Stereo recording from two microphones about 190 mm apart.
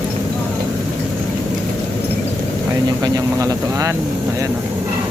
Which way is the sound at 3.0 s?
20° right (ahead or behind).